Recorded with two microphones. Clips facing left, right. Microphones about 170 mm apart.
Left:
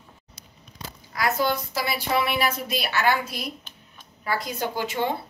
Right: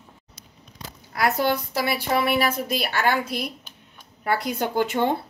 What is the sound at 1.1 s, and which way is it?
A woman's voice, 60° right (ahead or behind).